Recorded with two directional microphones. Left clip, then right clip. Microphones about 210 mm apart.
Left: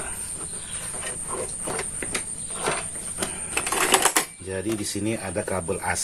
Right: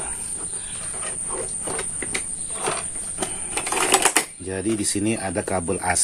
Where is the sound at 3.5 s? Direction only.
10° right (ahead or behind).